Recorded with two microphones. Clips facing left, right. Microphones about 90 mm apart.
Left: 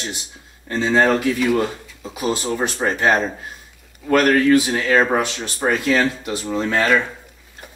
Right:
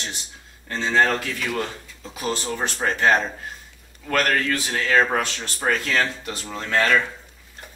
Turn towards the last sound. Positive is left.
turn(degrees=10)  # may be behind; listen again after turning